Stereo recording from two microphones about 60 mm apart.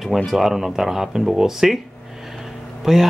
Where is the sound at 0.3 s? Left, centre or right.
Centre.